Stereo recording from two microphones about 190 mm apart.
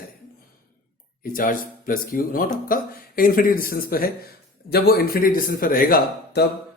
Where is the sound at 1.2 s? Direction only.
50° left (ahead or behind).